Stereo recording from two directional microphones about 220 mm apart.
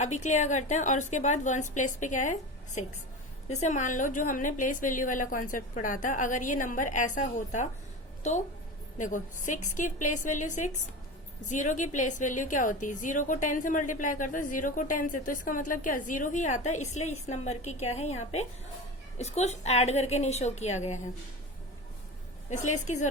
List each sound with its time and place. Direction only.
0.0 s a woman's voice: 30° left (ahead or behind)
22.4 s a woman's voice: 35° left (ahead or behind)